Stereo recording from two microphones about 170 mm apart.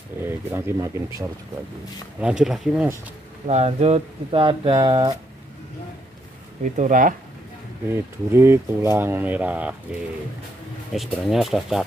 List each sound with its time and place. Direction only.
0.2 s speech: 15° right (ahead or behind)
2.1 s speech: 5° right (ahead or behind)
3.4 s speech: 40° right (ahead or behind)
6.6 s speech: 50° right (ahead or behind)
7.9 s speech: 15° right (ahead or behind)
10.9 s speech: centre (ahead or behind)